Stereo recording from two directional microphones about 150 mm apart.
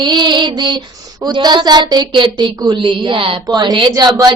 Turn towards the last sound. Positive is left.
turn(degrees=-25)  # may be behind; listen again after turning